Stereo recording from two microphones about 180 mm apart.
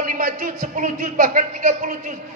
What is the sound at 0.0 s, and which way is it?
A man's voice, 50° right (ahead or behind).